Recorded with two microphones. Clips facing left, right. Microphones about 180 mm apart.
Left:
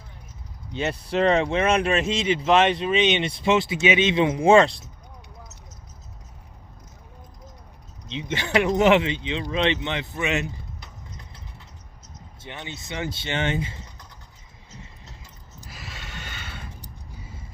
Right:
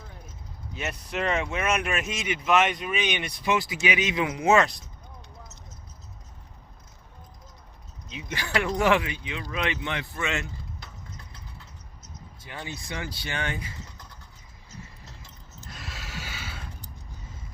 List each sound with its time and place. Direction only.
0.7 s speech: 30° left (ahead or behind)
8.0 s speech: 25° left (ahead or behind)
12.4 s speech: 25° left (ahead or behind)
15.7 s snort: centre (ahead or behind)